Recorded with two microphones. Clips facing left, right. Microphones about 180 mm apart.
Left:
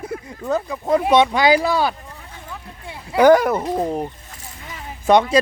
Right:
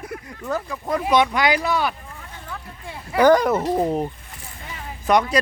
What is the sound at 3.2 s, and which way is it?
Speech, 10° left (ahead or behind).